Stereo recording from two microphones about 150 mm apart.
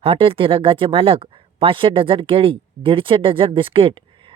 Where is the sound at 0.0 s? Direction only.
40° right (ahead or behind).